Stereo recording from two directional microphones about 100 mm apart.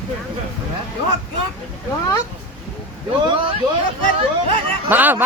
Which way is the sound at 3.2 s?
60° right (ahead or behind).